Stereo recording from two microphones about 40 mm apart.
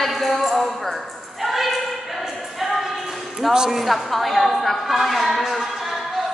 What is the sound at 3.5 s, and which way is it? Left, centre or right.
Speech, centre.